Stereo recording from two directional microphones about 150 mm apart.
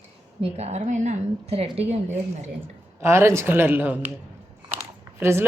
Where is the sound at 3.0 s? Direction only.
15° right (ahead or behind).